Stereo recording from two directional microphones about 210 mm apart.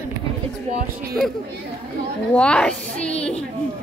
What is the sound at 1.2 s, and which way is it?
Speech, centre (ahead or behind).